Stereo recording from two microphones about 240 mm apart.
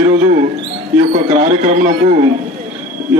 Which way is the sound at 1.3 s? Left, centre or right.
Right.